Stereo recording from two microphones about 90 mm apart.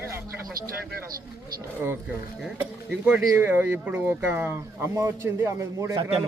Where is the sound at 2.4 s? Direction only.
10° right (ahead or behind).